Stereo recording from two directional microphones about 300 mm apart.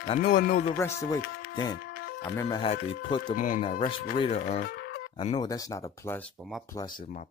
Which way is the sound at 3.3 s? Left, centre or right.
Left.